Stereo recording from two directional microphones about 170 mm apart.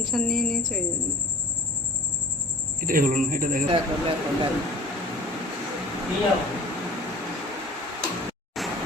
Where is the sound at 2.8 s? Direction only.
55° right (ahead or behind).